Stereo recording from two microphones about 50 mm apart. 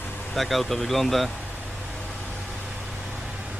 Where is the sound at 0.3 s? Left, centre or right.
Centre.